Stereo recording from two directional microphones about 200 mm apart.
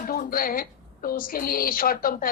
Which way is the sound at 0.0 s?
45° left (ahead or behind).